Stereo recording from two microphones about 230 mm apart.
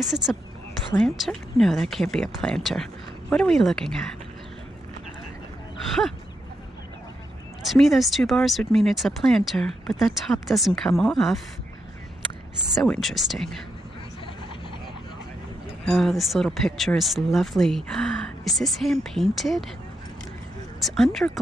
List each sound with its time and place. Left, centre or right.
0.0 s speech: centre
7.7 s speech: centre
12.7 s speech: centre
15.9 s speech: centre
20.8 s speech: centre